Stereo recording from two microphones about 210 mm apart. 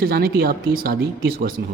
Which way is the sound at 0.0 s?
45° right (ahead or behind).